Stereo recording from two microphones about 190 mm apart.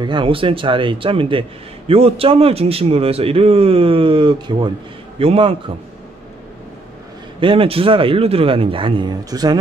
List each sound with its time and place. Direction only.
0.0 s a man's voice: 25° right (ahead or behind)
7.3 s a man's voice: 25° right (ahead or behind)